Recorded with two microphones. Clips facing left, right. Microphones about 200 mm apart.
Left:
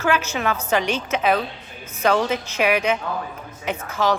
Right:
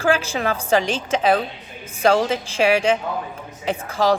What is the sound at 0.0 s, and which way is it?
A woman's voice, 30° right (ahead or behind).